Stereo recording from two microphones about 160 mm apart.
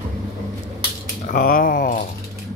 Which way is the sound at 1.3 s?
60° left (ahead or behind).